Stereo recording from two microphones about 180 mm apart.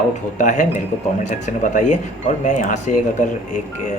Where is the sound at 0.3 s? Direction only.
45° left (ahead or behind).